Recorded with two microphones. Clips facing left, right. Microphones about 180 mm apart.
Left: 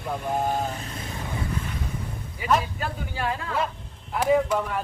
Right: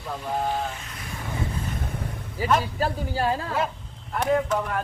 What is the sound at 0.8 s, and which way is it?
Speech, 30° left (ahead or behind).